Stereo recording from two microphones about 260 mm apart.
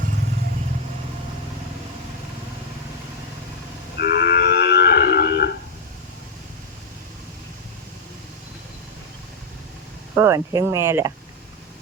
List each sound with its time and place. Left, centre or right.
3.9 s livestock: left
10.2 s speech: centre